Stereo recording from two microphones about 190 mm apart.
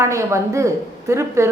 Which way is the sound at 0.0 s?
15° right (ahead or behind).